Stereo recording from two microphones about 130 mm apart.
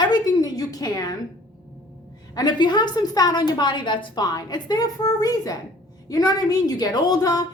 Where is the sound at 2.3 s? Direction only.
35° left (ahead or behind).